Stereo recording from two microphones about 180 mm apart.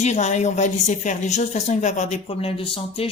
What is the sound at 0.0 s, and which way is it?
Speech, 40° left (ahead or behind).